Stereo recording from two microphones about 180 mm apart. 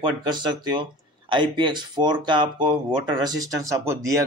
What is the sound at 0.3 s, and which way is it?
Speech, 25° right (ahead or behind).